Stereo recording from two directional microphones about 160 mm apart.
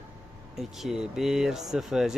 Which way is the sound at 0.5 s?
Centre (ahead or behind).